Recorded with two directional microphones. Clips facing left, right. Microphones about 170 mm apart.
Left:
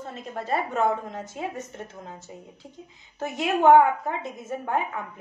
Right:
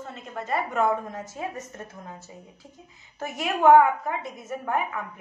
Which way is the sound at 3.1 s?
25° left (ahead or behind).